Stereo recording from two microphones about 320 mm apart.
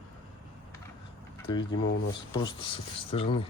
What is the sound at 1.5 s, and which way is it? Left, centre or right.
Speech, centre.